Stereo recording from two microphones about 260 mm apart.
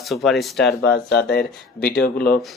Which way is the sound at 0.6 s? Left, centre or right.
Left.